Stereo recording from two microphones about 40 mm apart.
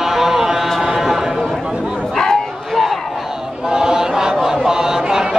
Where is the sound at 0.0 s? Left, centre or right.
Centre.